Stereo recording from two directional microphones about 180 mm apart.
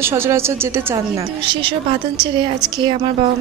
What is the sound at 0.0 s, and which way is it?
A woman's voice, 15° right (ahead or behind).